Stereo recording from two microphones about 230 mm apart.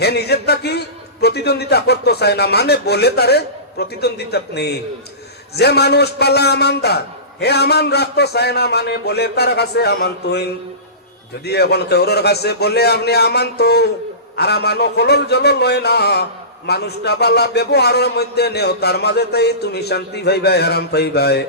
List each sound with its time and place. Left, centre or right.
0.0 s a man's voice: left